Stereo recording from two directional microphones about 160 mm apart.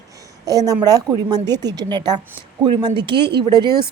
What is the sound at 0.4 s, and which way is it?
A woman's voice, 20° right (ahead or behind).